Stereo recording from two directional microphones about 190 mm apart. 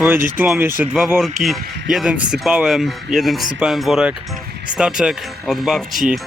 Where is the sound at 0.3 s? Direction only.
5° right (ahead or behind).